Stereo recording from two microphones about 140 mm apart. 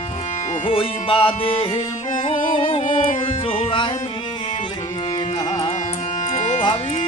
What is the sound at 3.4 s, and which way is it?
Music, 40° left (ahead or behind).